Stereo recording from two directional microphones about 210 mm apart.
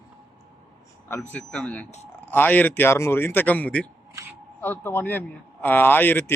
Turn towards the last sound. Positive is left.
turn(degrees=10)  # may be behind; listen again after turning